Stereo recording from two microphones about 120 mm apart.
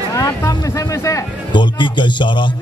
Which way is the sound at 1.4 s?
40° left (ahead or behind).